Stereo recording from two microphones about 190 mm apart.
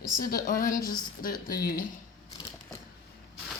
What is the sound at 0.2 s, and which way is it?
Speech, 50° left (ahead or behind).